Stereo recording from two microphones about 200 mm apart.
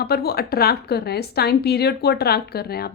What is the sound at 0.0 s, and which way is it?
Speech, 50° left (ahead or behind).